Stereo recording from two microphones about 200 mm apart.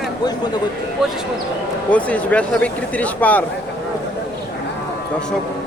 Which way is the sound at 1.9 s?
5° left (ahead or behind).